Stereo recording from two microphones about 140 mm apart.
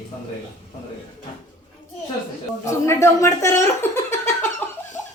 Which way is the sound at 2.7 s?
20° left (ahead or behind).